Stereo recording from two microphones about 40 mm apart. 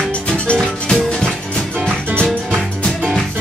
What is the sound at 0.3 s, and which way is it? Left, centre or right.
Music, left.